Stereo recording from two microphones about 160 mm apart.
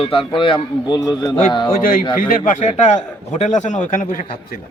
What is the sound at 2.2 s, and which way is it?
A man's voice, 55° left (ahead or behind).